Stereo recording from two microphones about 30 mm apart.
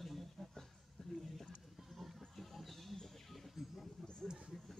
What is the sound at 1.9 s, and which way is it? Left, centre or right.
Music, centre.